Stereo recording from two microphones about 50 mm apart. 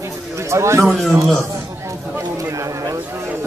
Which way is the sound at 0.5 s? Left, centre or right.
Right.